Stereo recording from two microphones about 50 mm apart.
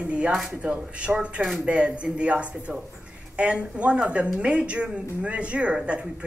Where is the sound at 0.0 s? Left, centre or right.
Right.